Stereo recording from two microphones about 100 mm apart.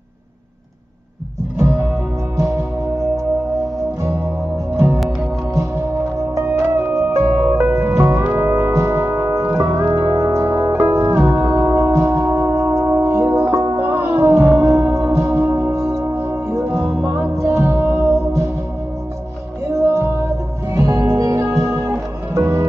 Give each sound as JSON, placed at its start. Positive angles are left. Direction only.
{"t": 2.3, "sound": "music", "side_deg": -35}
{"t": 4.7, "sound": "music", "side_deg": -30}
{"t": 6.9, "sound": "music", "side_deg": -30}
{"t": 11.1, "sound": "music", "side_deg": -35}
{"t": 17.9, "sound": "music", "side_deg": -5}
{"t": 19.7, "sound": "music", "side_deg": -30}